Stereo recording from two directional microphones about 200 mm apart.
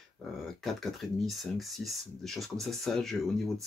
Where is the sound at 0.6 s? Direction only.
Centre (ahead or behind).